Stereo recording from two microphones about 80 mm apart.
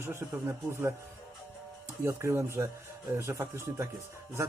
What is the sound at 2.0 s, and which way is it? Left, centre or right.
Speech, right.